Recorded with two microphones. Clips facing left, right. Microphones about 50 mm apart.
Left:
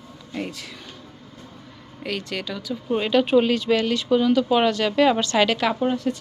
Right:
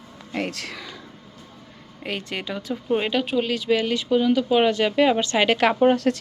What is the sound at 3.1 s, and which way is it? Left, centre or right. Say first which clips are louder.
Speech: left 5 dB; centre.